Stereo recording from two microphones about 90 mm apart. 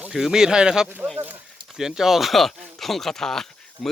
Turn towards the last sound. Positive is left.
turn(degrees=5)  # may be behind; listen again after turning